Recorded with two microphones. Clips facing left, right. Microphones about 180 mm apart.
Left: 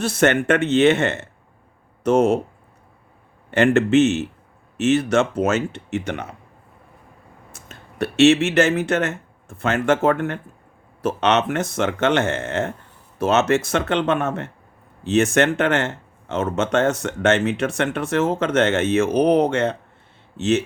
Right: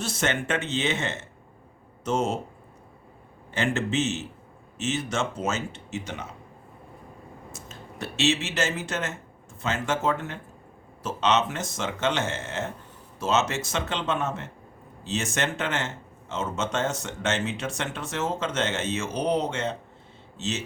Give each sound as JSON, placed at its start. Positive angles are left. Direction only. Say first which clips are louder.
{"t": 0.0, "sound": "speech", "louder": "left 10 dB", "side_deg": 60}
{"t": 3.5, "sound": "speech", "louder": "left 11 dB", "side_deg": 65}
{"t": 7.5, "sound": "speech", "louder": "right 2 dB", "side_deg": 60}